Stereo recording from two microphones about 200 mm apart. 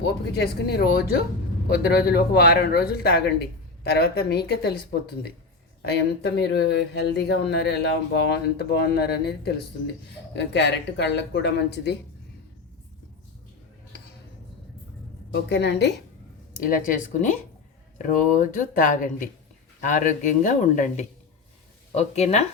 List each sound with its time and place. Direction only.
0.0 s a man's voice: 55° left (ahead or behind)
5.8 s speech: 55° left (ahead or behind)
15.3 s speech: 60° left (ahead or behind)
16.6 s a man's voice: 45° left (ahead or behind)